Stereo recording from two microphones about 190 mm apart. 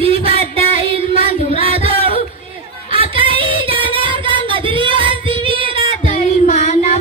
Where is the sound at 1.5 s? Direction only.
30° right (ahead or behind).